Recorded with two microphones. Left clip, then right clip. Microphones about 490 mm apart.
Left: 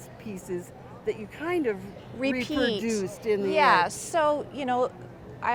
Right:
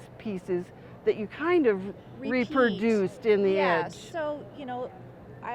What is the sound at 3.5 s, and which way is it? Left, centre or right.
A woman's voice, left.